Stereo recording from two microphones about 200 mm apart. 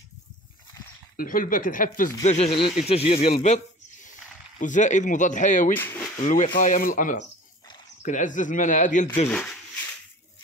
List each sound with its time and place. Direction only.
1.1 s speech: 45° left (ahead or behind)
5.8 s speech: 10° left (ahead or behind)
6.1 s speech: 40° left (ahead or behind)
9.3 s speech: 5° left (ahead or behind)